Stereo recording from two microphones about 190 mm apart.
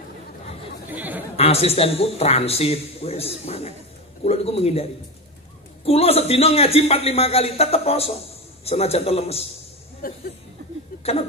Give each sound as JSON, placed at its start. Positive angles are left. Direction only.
{"t": 0.8, "sound": "chatter", "side_deg": -10}
{"t": 1.3, "sound": "a man's voice", "side_deg": 30}
{"t": 5.9, "sound": "a man's voice", "side_deg": 30}
{"t": 10.0, "sound": "speech", "side_deg": 50}